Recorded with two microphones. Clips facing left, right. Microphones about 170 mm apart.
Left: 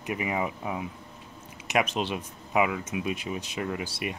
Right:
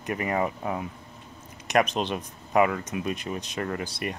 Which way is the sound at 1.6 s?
5° left (ahead or behind).